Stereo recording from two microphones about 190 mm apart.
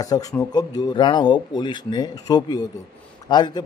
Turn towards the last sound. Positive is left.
turn(degrees=20)  # may be behind; listen again after turning